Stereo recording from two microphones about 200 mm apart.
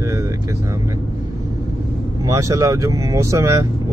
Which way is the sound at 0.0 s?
15° right (ahead or behind).